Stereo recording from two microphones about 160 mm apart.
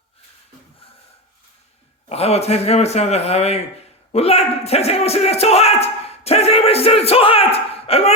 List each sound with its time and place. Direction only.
2.0 s speech: 40° left (ahead or behind)